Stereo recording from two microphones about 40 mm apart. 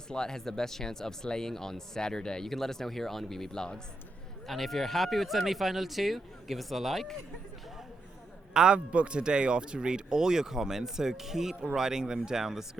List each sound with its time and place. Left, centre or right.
0.1 s speech: centre
4.4 s speech: centre
8.5 s a man's voice: centre
8.9 s speech: right; by 12.6 s centre